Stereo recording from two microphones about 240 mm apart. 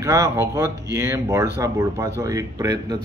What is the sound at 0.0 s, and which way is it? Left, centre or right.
A man's voice, centre.